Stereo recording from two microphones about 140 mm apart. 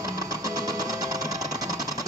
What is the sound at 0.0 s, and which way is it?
Sewing machine, 25° right (ahead or behind).